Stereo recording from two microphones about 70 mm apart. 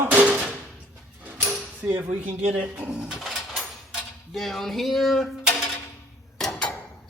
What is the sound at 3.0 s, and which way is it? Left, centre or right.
Bird, centre.